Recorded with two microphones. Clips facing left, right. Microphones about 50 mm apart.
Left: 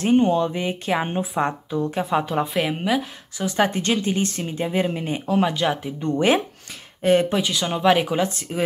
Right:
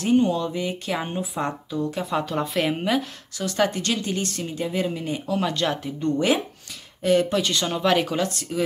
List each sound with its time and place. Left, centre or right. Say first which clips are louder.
0.0 s speech: left 3 dB; left
2.0 s speech: left 3 dB; centre
3.3 s speech: left 2 dB; centre
5.5 s speech: left 2 dB; centre
6.0 s speech: left 2 dB; left
7.4 s speech: left 3 dB; centre